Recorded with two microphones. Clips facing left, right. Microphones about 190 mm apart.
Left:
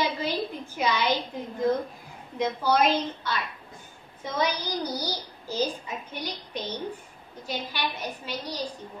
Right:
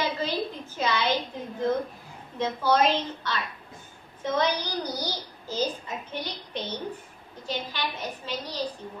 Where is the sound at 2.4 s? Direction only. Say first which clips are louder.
Even; 10° left (ahead or behind).